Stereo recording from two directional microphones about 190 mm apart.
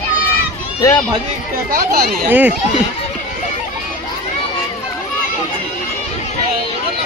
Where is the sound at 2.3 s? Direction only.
10° right (ahead or behind).